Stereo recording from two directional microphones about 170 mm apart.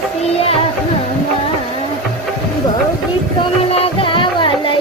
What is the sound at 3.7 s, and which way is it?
Music, 35° left (ahead or behind).